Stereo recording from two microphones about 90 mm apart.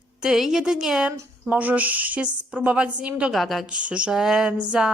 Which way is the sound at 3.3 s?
Centre (ahead or behind).